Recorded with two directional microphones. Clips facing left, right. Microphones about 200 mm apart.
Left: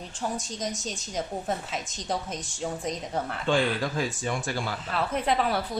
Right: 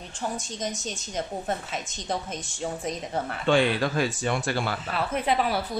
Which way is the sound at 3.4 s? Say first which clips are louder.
Right 4 dB; 70° right (ahead or behind).